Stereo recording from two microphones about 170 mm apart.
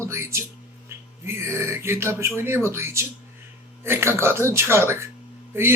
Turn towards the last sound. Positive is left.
turn(degrees=-15)  # may be behind; listen again after turning